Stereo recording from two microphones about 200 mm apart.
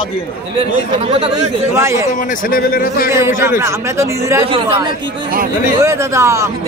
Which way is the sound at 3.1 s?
15° right (ahead or behind).